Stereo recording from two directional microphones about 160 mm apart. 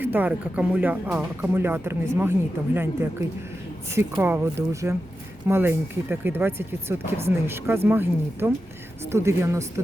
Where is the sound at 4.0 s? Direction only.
15° right (ahead or behind).